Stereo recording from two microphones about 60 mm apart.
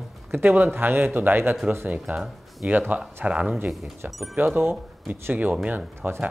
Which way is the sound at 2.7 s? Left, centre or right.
Right.